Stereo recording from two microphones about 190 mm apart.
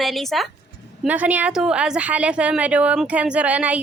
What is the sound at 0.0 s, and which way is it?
A woman's voice, centre (ahead or behind).